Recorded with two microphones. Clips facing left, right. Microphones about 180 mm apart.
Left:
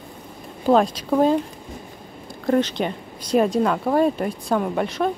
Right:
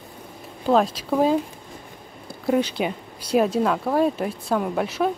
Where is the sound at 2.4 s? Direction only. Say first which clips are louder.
Left 1 dB; 10° right (ahead or behind).